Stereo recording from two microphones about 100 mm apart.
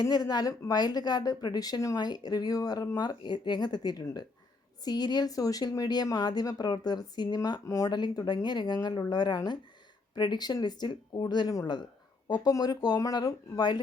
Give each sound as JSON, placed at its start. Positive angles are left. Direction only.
{"t": 0.0, "sound": "speech", "side_deg": 45}